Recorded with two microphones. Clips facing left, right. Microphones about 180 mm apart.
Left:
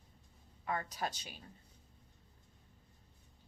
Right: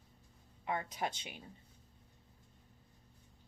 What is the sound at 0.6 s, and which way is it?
Speech, 20° right (ahead or behind).